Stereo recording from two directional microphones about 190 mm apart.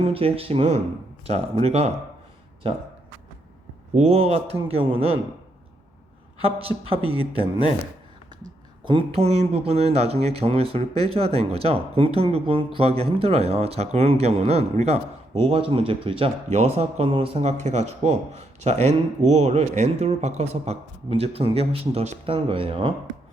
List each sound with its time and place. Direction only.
0.0 s speech: 30° right (ahead or behind)
3.9 s speech: 35° right (ahead or behind)
6.4 s speech: 30° right (ahead or behind)
8.8 s speech: 25° right (ahead or behind)